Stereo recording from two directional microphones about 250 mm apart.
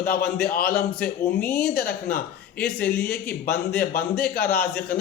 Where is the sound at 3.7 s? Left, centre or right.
Left.